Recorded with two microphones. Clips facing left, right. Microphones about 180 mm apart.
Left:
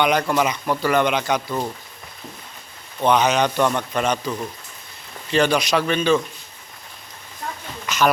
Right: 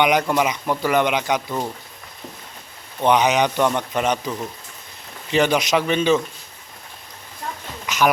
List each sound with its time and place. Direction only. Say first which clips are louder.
0.0 s speech: right 1 dB; 15° right (ahead or behind)
3.0 s a man's voice: right 1 dB; 15° right (ahead or behind)
7.9 s a sound: even; 15° right (ahead or behind)